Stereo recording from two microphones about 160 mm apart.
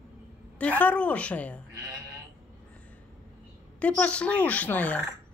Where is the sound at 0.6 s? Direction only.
10° left (ahead or behind).